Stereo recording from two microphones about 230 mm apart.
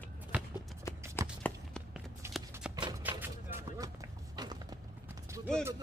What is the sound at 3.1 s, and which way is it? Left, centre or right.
Music, centre.